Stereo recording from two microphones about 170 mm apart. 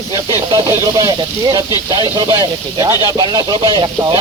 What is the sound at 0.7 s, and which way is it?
Speech, 20° right (ahead or behind).